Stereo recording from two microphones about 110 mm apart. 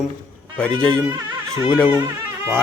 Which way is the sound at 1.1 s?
40° right (ahead or behind).